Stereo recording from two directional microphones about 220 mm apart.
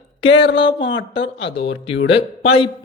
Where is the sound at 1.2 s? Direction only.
25° left (ahead or behind).